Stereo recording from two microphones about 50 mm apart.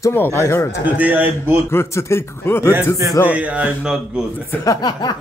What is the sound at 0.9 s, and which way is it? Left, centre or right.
Speech, right.